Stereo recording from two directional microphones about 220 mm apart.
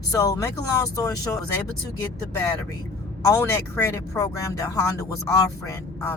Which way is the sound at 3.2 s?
15° left (ahead or behind).